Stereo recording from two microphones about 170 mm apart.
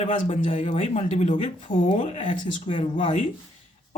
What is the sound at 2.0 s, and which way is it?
Speech, 45° left (ahead or behind).